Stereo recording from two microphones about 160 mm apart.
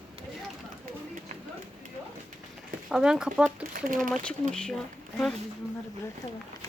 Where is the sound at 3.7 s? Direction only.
60° right (ahead or behind).